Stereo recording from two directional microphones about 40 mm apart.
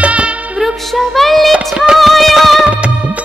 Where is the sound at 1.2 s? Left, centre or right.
Centre.